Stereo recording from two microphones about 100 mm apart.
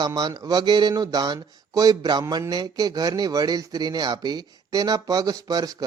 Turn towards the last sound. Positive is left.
turn(degrees=-40)  # may be behind; listen again after turning